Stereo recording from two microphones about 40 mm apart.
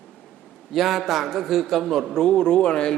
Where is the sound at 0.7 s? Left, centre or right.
Centre.